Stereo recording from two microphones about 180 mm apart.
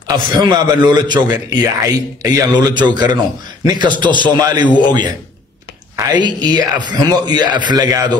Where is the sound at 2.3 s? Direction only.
20° right (ahead or behind).